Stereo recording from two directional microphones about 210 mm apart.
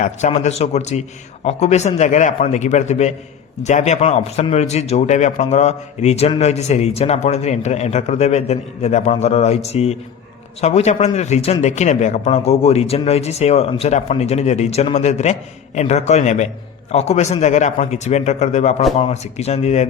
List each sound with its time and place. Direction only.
0.0 s a man's voice: 30° left (ahead or behind)